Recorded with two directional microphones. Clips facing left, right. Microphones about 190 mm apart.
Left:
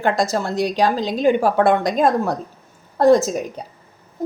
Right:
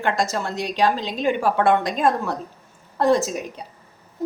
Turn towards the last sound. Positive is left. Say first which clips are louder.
# left 5 dB
turn(degrees=40)  # may be behind; listen again after turning